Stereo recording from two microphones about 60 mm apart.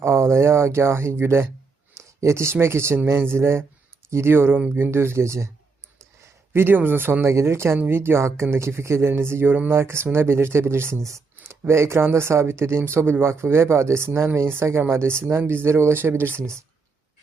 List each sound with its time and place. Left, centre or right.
0.0 s speech: right
2.0 s speech: right
6.5 s speech: right
16.4 s speech: right